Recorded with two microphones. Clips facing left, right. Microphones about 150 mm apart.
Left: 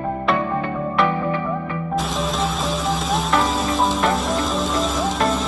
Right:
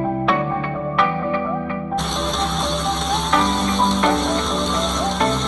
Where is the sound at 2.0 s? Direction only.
5° left (ahead or behind).